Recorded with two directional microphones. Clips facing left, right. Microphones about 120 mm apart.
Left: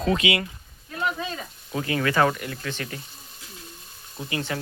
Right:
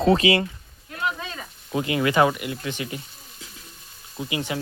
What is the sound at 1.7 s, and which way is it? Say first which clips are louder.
Speech: right 3 dB; 15° right (ahead or behind).